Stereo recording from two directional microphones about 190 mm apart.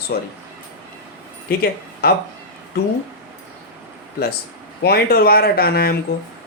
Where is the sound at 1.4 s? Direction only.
55° left (ahead or behind).